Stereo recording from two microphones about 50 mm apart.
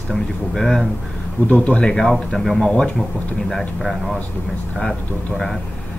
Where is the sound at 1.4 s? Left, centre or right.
Left.